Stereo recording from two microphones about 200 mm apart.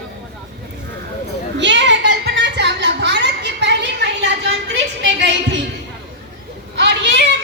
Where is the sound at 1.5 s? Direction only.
60° right (ahead or behind).